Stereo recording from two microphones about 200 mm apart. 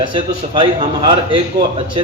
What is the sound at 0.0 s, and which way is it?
A man's voice, 25° right (ahead or behind).